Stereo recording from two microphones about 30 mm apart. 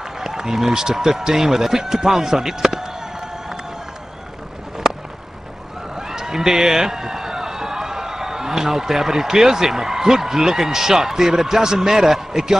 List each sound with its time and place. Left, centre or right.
0.0 s a sound: centre
0.7 s speech: centre
5.9 s speech: centre